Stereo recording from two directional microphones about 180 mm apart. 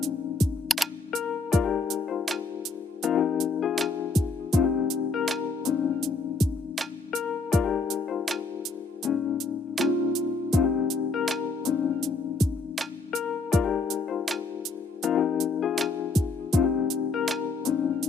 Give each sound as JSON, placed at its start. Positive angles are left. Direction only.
{"t": 0.0, "sound": "music", "side_deg": 0}